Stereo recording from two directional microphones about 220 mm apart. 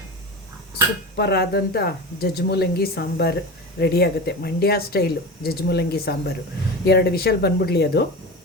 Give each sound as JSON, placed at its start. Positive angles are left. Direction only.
{"t": 1.1, "sound": "speech", "side_deg": 50}